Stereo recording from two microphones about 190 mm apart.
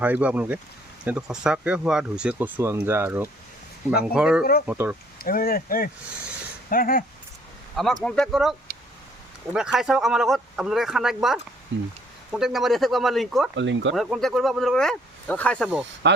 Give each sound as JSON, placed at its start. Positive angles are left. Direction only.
{"t": 0.0, "sound": "speech", "side_deg": -10}
{"t": 5.2, "sound": "speech", "side_deg": 50}
{"t": 8.0, "sound": "speech", "side_deg": 5}
{"t": 11.7, "sound": "speech", "side_deg": -80}
{"t": 12.3, "sound": "speech", "side_deg": 0}
{"t": 13.6, "sound": "speech", "side_deg": -75}
{"t": 13.9, "sound": "speech", "side_deg": 0}
{"t": 16.0, "sound": "speech", "side_deg": -65}